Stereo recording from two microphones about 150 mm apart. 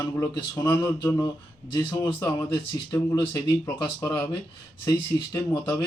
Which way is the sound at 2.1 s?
20° left (ahead or behind).